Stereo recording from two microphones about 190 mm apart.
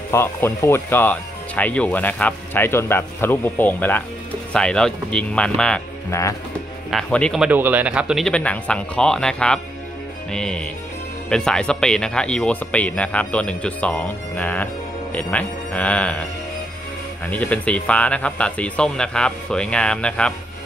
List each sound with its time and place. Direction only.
0.1 s speech: 15° left (ahead or behind)
6.0 s speech: 15° left (ahead or behind)
6.9 s speech: 5° left (ahead or behind)
17.3 s speech: 5° left (ahead or behind)